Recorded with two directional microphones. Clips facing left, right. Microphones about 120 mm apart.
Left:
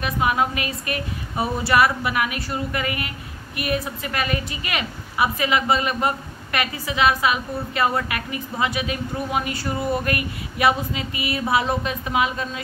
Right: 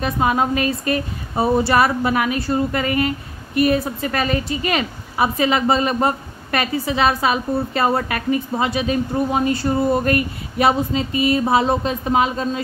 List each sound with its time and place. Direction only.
0.0 s a woman's voice: 30° right (ahead or behind)